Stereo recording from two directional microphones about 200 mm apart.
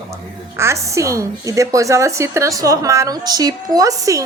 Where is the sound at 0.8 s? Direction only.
15° right (ahead or behind).